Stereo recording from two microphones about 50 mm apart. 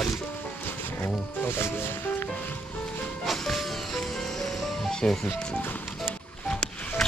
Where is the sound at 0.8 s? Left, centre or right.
Left.